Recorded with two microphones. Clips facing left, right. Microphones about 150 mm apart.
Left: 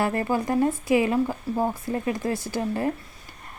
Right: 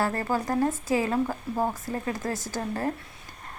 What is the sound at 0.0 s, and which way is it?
Speech, 15° left (ahead or behind).